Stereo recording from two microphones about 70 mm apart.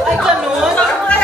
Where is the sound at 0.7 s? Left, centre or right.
Centre.